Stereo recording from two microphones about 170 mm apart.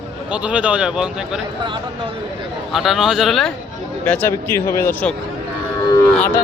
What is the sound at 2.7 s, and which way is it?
A man's voice, centre (ahead or behind).